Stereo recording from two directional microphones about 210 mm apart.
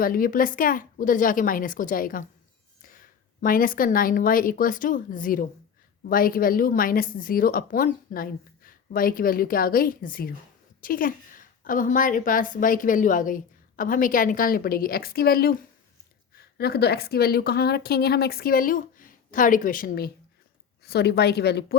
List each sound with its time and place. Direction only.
0.0 s a woman's voice: 40° left (ahead or behind)
3.4 s a woman's voice: 40° left (ahead or behind)